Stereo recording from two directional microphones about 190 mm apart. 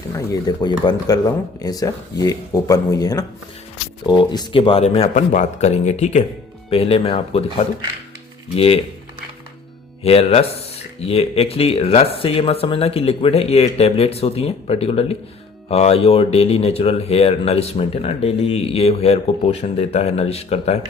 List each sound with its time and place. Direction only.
0.1 s speech: 20° left (ahead or behind)
8.5 s speech: 30° left (ahead or behind)
10.0 s speech: 30° left (ahead or behind)